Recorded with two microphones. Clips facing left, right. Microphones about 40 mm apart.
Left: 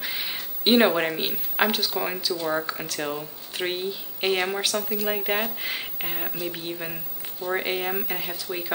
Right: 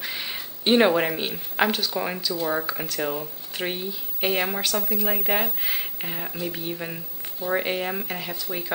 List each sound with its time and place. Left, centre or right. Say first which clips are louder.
0.0 s speech: even; centre